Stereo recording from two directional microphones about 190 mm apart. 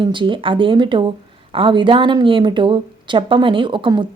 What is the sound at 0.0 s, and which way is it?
A woman's voice, 25° right (ahead or behind).